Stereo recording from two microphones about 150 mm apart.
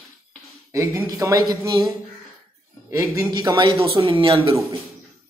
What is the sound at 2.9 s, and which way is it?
Speech, 20° right (ahead or behind).